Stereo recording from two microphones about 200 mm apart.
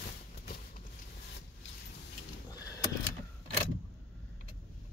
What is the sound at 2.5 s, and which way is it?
Power windows, 20° left (ahead or behind).